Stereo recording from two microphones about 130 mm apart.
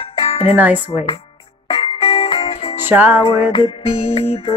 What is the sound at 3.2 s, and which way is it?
Music, 40° left (ahead or behind).